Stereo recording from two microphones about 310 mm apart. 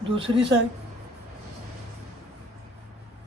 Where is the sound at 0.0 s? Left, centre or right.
Centre.